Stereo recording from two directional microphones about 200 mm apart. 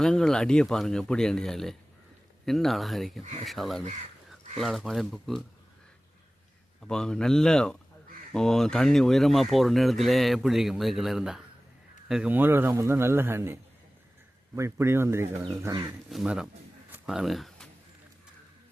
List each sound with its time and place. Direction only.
0.0 s speech: 5° left (ahead or behind)
6.8 s speech: 5° left (ahead or behind); by 15.9 s 20° right (ahead or behind)
16.0 s speech: 5° right (ahead or behind)
16.9 s a sound: 5° right (ahead or behind)